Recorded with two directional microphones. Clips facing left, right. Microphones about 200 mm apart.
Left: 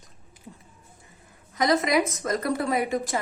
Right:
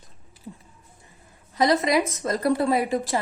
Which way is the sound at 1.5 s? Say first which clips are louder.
Right 2 dB; 30° right (ahead or behind).